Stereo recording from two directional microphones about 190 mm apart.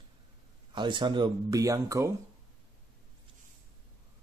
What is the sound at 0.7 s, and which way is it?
Speech, 25° right (ahead or behind).